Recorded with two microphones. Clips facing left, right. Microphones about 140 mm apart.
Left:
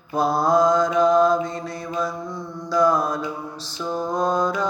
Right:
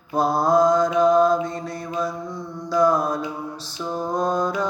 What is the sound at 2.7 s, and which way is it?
Mantra, 60° right (ahead or behind).